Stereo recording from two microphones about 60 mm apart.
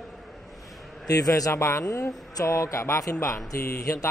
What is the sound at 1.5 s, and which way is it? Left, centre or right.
Speech, left.